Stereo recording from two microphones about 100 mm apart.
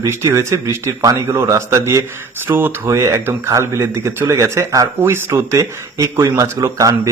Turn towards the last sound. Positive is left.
turn(degrees=-35)  # may be behind; listen again after turning